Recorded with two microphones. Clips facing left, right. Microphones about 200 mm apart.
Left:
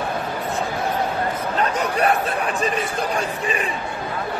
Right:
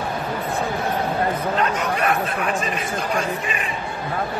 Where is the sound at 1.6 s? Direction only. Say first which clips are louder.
Left 5 dB; 35° left (ahead or behind).